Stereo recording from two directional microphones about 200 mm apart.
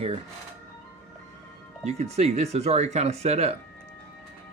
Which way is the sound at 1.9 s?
35° right (ahead or behind).